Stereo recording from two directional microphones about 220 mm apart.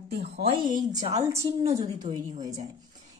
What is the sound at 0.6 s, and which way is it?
A woman's voice, 20° right (ahead or behind).